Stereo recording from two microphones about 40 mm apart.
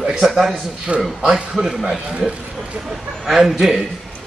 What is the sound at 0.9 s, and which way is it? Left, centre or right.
Speech, right.